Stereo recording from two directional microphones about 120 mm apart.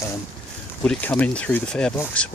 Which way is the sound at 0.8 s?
15° left (ahead or behind).